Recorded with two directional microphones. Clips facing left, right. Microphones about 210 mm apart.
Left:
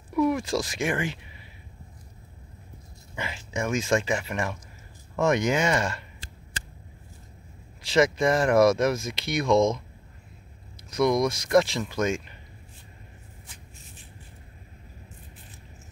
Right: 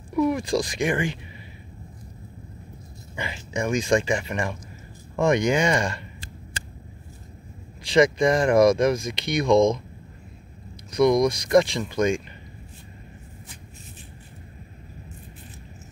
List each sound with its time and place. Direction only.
0.1 s speech: centre (ahead or behind)
3.2 s speech: centre (ahead or behind)
7.8 s speech: 5° left (ahead or behind)
10.9 s speech: 5° left (ahead or behind)